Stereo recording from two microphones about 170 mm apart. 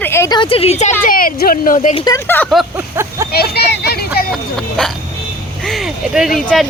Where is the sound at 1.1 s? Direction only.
55° left (ahead or behind).